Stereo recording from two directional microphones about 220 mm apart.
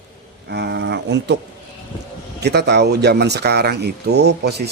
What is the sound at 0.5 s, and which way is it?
Speech, 50° right (ahead or behind).